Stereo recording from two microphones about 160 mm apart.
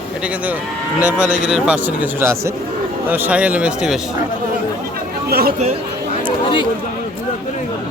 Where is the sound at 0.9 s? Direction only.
5° right (ahead or behind).